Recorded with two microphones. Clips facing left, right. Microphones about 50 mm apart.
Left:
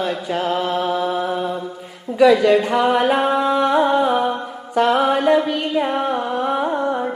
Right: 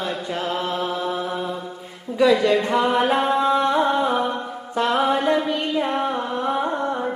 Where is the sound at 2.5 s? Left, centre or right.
Centre.